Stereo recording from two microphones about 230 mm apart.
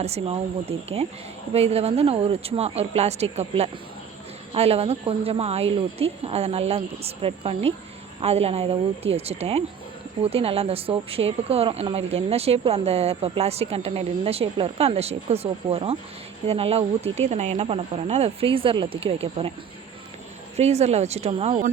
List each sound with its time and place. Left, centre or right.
0.0 s speech: right
20.6 s speech: right